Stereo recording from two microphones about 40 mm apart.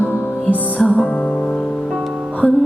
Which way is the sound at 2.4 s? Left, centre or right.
Left.